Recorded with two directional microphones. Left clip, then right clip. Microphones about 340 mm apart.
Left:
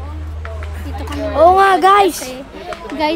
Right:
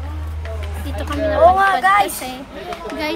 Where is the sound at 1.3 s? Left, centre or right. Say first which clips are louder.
Left 3 dB; left.